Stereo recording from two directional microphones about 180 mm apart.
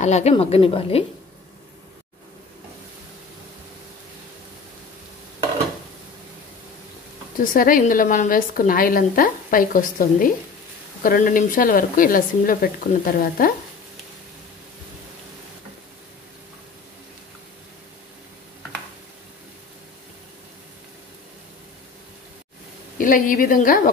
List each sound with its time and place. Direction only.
0.0 s a woman's voice: 40° left (ahead or behind)
7.3 s a woman's voice: 50° left (ahead or behind)
22.9 s a woman's voice: 50° left (ahead or behind)